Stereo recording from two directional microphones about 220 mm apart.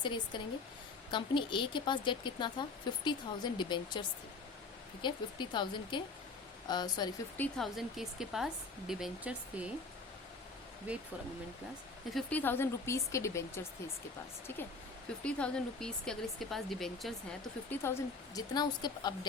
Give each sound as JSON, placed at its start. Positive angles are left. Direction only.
{"t": 0.0, "sound": "speech", "side_deg": 20}
{"t": 5.0, "sound": "speech", "side_deg": 20}
{"t": 7.3, "sound": "speech", "side_deg": 5}
{"t": 10.9, "sound": "speech", "side_deg": -5}
{"t": 12.1, "sound": "speech", "side_deg": 10}
{"t": 15.2, "sound": "speech", "side_deg": 5}